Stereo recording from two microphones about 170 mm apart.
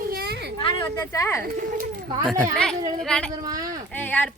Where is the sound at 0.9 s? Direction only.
20° left (ahead or behind).